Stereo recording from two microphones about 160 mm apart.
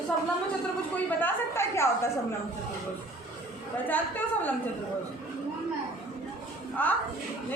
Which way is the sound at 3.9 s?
10° left (ahead or behind).